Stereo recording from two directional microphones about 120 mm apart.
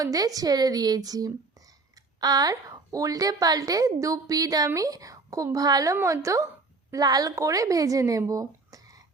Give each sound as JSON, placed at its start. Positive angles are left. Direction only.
{"t": 0.0, "sound": "speech", "side_deg": -30}